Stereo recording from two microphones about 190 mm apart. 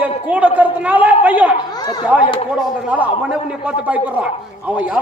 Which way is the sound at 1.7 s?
20° left (ahead or behind).